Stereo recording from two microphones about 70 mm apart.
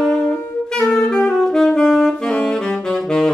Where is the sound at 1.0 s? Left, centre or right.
Centre.